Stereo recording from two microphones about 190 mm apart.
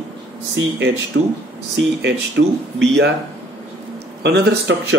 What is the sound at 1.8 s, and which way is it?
Speech, 65° right (ahead or behind).